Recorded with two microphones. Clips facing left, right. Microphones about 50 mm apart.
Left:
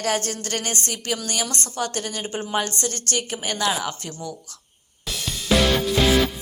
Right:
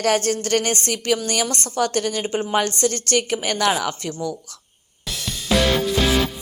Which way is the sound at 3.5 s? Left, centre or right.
Right.